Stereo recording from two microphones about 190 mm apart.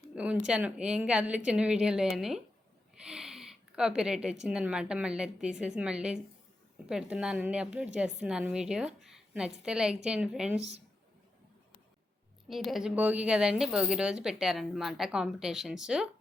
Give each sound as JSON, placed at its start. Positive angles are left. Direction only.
{"t": 0.2, "sound": "a woman's voice", "side_deg": -5}
{"t": 3.0, "sound": "gasp", "side_deg": -5}
{"t": 4.4, "sound": "a woman's voice", "side_deg": -5}
{"t": 10.6, "sound": "a man's voice", "side_deg": -35}
{"t": 12.5, "sound": "a woman's voice", "side_deg": 0}